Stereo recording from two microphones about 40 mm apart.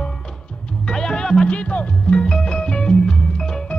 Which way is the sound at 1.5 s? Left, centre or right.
Left.